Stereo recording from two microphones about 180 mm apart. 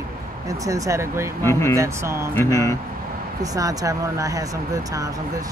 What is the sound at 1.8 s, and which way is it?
Speech, 15° right (ahead or behind).